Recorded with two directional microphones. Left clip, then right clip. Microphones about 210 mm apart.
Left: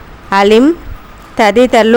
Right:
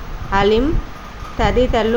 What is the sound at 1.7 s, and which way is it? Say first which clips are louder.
Speech: left 9 dB; 55° left (ahead or behind).